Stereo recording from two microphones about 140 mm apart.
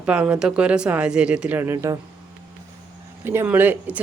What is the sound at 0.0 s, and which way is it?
Speech, 10° right (ahead or behind).